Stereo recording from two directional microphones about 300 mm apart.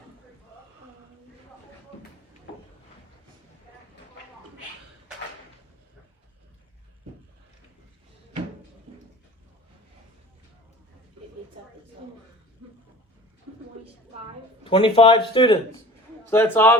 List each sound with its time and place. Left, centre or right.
14.6 s speech: centre